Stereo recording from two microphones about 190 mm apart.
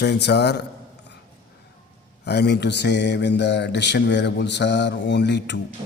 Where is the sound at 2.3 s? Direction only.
60° left (ahead or behind).